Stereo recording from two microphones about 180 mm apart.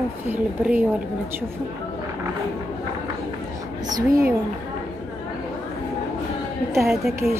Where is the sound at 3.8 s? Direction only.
20° right (ahead or behind).